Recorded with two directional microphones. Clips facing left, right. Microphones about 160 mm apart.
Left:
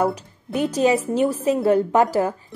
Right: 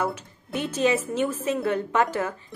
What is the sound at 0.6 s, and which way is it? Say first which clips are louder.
A woman's voice: left 5 dB; 40° left (ahead or behind).